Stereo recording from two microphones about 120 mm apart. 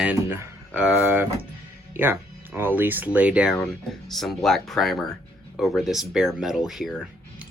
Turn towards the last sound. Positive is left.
turn(degrees=0)  # may be behind; listen again after turning